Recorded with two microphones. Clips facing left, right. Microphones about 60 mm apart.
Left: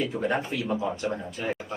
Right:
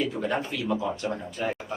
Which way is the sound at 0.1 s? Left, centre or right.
Left.